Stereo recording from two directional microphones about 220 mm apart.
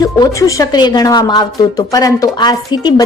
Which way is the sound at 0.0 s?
15° left (ahead or behind).